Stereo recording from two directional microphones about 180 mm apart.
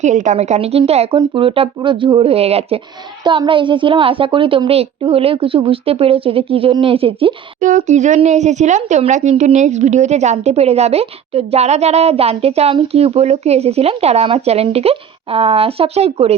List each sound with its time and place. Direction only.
0.0 s speech: 40° right (ahead or behind)
7.6 s speech: 45° right (ahead or behind)